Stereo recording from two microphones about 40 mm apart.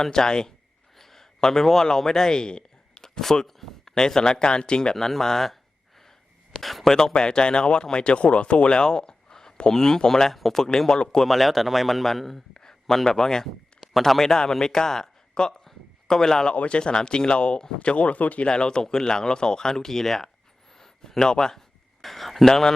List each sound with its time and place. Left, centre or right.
0.0 s a man's voice: centre
2.9 s speech: centre
4.9 s speech: centre
6.6 s speech: centre
7.1 s speech: centre
11.3 s speech: centre
12.5 s a sound: centre
14.0 s speech: centre
15.6 s a sound: centre
16.6 s speech: left
18.4 s speech: left
22.0 s speech: centre
22.4 s speech: centre